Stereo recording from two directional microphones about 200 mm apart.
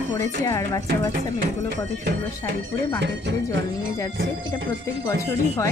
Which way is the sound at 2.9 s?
60° right (ahead or behind).